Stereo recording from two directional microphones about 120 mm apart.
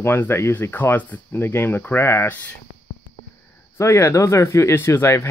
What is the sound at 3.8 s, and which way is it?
Speech, 25° left (ahead or behind).